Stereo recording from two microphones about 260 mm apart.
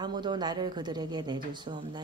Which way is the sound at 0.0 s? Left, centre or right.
Centre.